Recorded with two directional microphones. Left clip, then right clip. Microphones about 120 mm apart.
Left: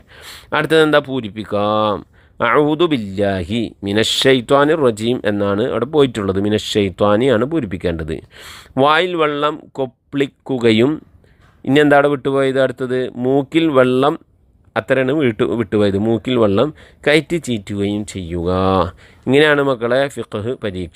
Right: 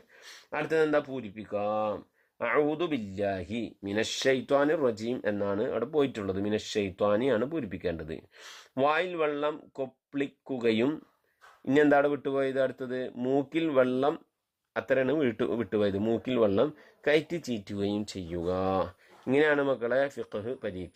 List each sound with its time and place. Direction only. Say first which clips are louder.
0.2 s speech: left 15 dB; 55° left (ahead or behind); by 2.0 s 75° left (ahead or behind)
2.4 s speech: left 14 dB; 60° left (ahead or behind); by 17.8 s 40° left (ahead or behind)
17.8 s speech: left 10 dB; 30° left (ahead or behind); by 20.9 s 45° left (ahead or behind)